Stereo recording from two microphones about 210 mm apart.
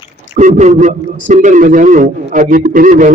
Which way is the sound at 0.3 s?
35° right (ahead or behind).